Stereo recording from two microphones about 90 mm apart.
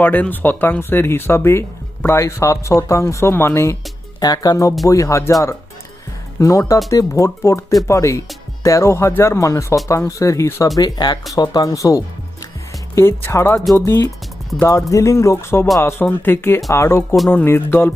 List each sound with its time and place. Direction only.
0.0 s speech: 20° left (ahead or behind)
4.2 s speech: 45° left (ahead or behind)
10.8 s speech: 50° left (ahead or behind); by 14.1 s 35° left (ahead or behind)
14.5 s speech: 5° left (ahead or behind)
14.8 s speech: 35° left (ahead or behind)